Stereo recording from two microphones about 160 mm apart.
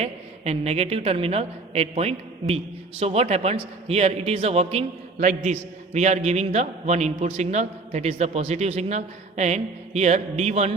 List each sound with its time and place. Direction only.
0.0 s a woman's voice: 40° right (ahead or behind)